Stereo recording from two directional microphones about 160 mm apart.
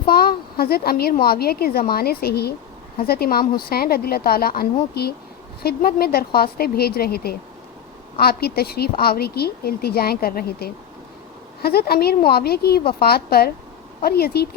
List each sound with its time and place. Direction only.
0.0 s a woman's voice: 70° left (ahead or behind)